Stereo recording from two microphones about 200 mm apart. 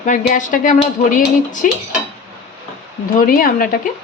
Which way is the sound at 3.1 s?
40° left (ahead or behind).